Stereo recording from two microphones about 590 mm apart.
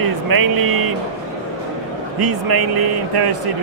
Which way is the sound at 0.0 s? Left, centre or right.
Right.